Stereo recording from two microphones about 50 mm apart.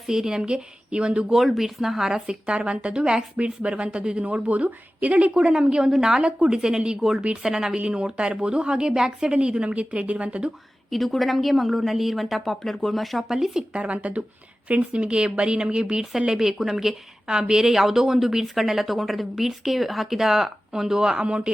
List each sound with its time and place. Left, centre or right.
0.1 s a woman's voice: centre
1.3 s a woman's voice: centre; by 10.5 s right
10.9 s a woman's voice: centre
13.6 s a woman's voice: right
21.2 s a woman's voice: centre